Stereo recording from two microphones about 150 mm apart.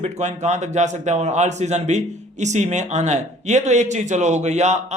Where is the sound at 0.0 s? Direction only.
50° right (ahead or behind).